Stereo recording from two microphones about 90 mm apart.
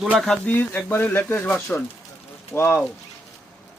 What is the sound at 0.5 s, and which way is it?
Speech, 20° left (ahead or behind).